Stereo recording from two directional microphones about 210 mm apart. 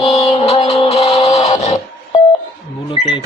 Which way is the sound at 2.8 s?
20° left (ahead or behind).